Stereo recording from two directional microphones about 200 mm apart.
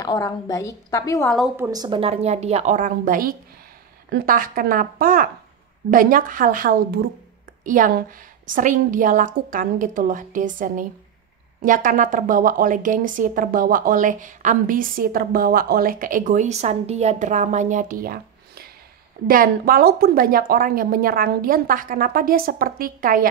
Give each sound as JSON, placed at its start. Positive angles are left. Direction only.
{"t": 0.0, "sound": "a woman's voice", "side_deg": 15}
{"t": 1.6, "sound": "a woman's voice", "side_deg": -20}